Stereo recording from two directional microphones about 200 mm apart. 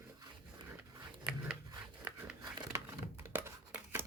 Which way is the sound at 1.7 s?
10° right (ahead or behind).